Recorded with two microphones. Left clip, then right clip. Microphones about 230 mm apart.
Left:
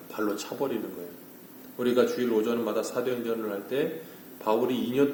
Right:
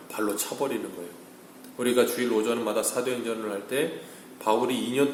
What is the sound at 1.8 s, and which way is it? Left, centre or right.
A man's voice, centre.